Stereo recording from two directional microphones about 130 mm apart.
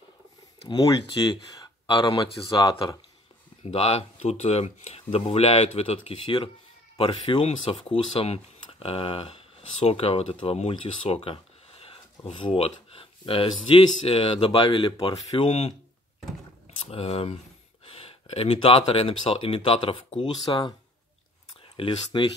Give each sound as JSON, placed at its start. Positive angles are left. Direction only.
{"t": 0.7, "sound": "speech", "side_deg": 30}
{"t": 3.7, "sound": "speech", "side_deg": 55}
{"t": 20.2, "sound": "speech", "side_deg": 35}
{"t": 21.7, "sound": "speech", "side_deg": 40}